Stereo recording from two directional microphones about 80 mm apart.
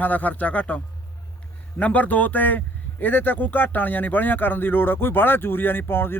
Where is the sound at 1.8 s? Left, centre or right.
Centre.